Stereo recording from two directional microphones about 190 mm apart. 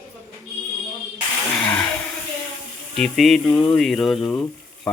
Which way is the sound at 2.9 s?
Centre (ahead or behind).